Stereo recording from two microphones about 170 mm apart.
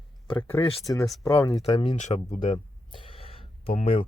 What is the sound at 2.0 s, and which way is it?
Speech, 45° left (ahead or behind).